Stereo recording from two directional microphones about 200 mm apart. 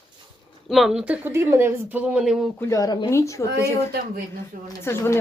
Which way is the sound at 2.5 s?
15° left (ahead or behind).